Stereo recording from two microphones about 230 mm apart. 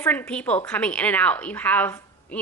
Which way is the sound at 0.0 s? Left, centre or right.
Centre.